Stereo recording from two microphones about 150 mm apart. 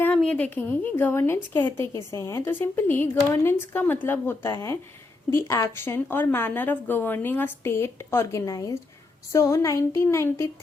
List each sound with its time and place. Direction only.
0.0 s a woman's voice: 5° left (ahead or behind)